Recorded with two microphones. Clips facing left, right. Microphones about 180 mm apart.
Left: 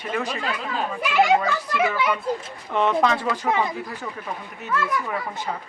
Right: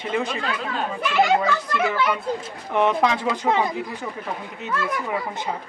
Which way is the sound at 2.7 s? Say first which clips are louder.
Right 1 dB; 15° right (ahead or behind).